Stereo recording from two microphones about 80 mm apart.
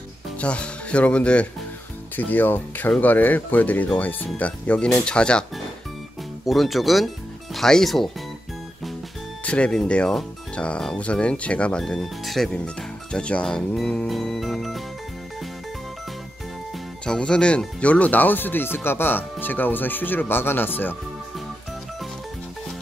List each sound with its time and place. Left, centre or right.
0.4 s speech: centre
6.4 s speech: centre
9.4 s speech: centre
11.8 s speech: centre
12.5 s speech: centre
17.0 s speech: centre